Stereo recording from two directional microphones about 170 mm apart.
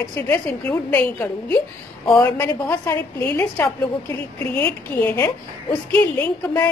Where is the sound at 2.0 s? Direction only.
25° left (ahead or behind).